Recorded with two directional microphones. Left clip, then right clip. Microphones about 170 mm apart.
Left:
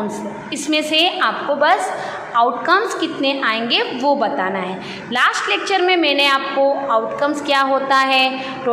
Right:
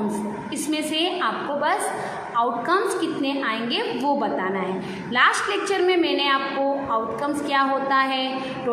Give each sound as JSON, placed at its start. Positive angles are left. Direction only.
{"t": 0.7, "sound": "a woman's voice", "side_deg": 15}